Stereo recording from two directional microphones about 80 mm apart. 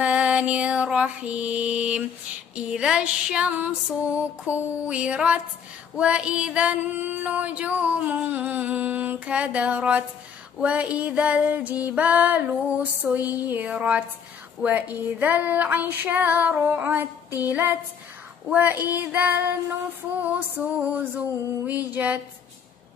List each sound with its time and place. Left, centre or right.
0.0 s music: centre
13.5 s female singing: centre